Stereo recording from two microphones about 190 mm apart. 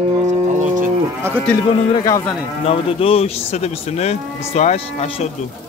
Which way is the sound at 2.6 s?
30° left (ahead or behind).